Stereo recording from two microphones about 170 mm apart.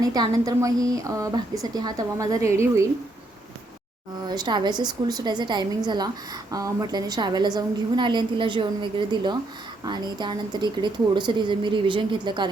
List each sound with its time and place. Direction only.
0.0 s a woman's voice: 20° right (ahead or behind)
4.3 s a woman's voice: 25° right (ahead or behind)